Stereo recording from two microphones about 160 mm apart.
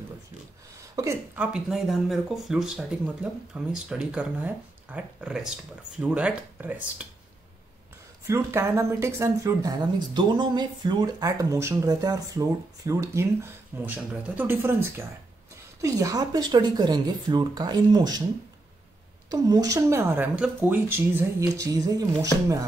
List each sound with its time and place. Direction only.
0.9 s speech: 20° right (ahead or behind)
1.4 s speech: 5° right (ahead or behind)
8.3 s speech: 15° right (ahead or behind)
19.2 s speech: 20° right (ahead or behind)